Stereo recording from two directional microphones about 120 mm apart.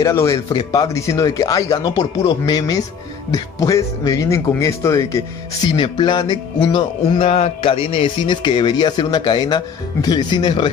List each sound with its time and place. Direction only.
0.0 s speech: 25° left (ahead or behind)
0.5 s music: 35° left (ahead or behind)
3.3 s speech: 25° left (ahead or behind)
5.8 s music: 40° left (ahead or behind)